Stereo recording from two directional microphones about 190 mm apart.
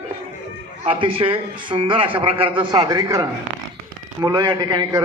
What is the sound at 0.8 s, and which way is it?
A man's voice, 30° right (ahead or behind).